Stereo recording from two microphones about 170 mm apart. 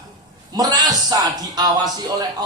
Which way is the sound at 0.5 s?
20° right (ahead or behind).